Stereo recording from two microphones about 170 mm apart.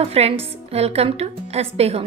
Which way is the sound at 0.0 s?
35° right (ahead or behind).